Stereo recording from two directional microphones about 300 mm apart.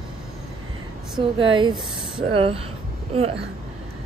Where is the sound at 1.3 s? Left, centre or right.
Centre.